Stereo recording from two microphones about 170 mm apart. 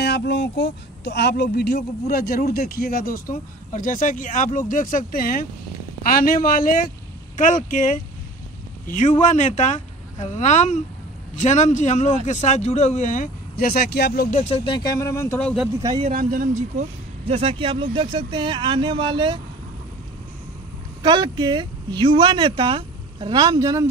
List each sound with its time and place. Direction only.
0.0 s speech: 85° left; by 14.4 s 65° left (ahead or behind)
14.4 s speech: 35° left (ahead or behind); by 15.4 s 15° left (ahead or behind)
15.4 s speech: 5° right (ahead or behind)
16.1 s speech: 55° right (ahead or behind)
17.3 s speech: 35° right (ahead or behind)
21.0 s speech: 25° right (ahead or behind)